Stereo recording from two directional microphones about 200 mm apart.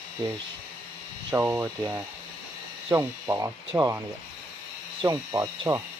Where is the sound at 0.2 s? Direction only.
20° right (ahead or behind).